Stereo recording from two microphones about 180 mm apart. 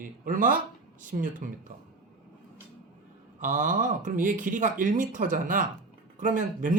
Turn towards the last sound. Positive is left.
turn(degrees=-45)  # may be behind; listen again after turning